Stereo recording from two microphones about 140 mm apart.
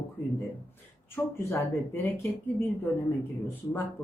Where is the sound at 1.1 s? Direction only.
15° left (ahead or behind).